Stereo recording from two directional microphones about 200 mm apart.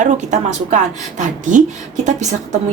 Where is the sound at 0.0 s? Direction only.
40° right (ahead or behind).